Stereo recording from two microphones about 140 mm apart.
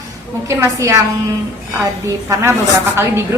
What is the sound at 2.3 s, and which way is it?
Speech, 20° right (ahead or behind).